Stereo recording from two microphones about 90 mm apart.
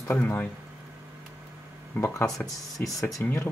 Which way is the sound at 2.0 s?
20° left (ahead or behind).